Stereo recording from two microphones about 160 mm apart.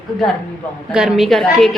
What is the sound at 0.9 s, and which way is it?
Speech, centre (ahead or behind).